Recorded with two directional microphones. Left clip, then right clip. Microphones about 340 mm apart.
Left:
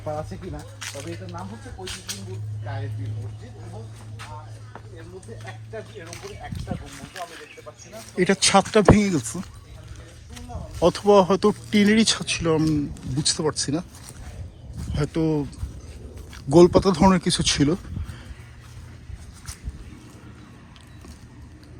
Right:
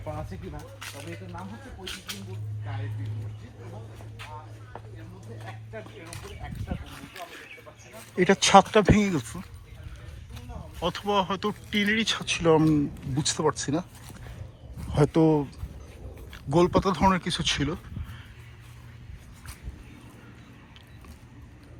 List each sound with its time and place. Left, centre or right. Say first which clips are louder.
0.8 s speech: left 6 dB; centre
1.8 s speech: left 3 dB; left
8.1 s speech: right 1 dB; centre
10.8 s speech: left 10 dB; centre
14.9 s speech: right 3 dB; centre
16.5 s speech: left 7 dB; centre